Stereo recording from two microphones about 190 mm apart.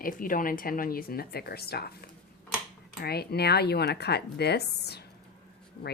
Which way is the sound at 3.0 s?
55° left (ahead or behind).